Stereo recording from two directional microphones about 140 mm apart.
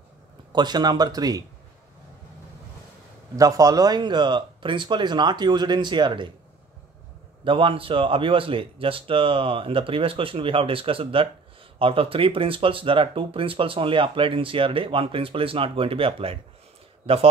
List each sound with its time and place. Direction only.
0.5 s speech: 30° right (ahead or behind)
3.3 s speech: 25° right (ahead or behind)
7.4 s speech: 40° right (ahead or behind)